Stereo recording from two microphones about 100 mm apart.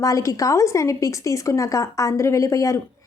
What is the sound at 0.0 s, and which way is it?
A woman's voice, 35° left (ahead or behind).